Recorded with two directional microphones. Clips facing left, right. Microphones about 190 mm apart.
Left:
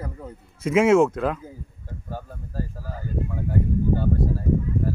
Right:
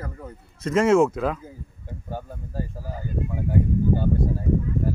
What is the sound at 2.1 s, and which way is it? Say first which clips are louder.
Speech: right 2 dB; 15° right (ahead or behind).